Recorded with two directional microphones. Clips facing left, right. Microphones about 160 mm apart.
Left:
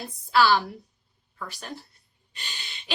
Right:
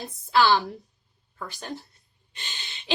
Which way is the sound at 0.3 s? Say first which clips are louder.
Even; 20° right (ahead or behind).